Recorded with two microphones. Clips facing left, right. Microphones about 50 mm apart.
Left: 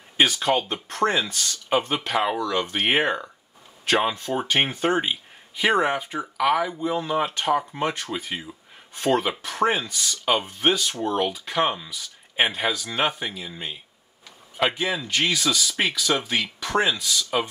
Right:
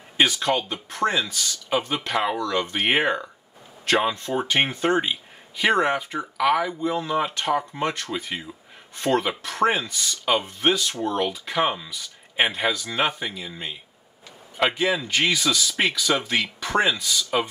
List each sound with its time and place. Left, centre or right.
0.4 s speech: centre
0.8 s speech: centre
2.0 s speech: centre